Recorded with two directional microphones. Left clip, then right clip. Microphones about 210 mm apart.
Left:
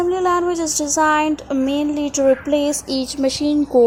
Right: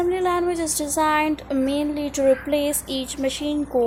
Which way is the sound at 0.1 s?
20° left (ahead or behind).